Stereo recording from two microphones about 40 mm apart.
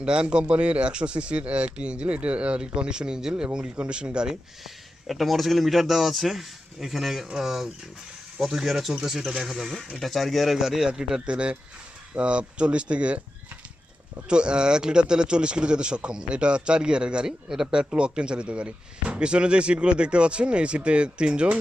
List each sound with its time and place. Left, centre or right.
0.0 s speech: right
5.0 s a man's voice: centre
11.3 s speech: right
14.3 s speech: right